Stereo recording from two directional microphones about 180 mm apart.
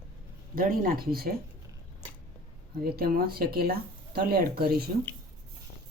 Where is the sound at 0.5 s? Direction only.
55° right (ahead or behind).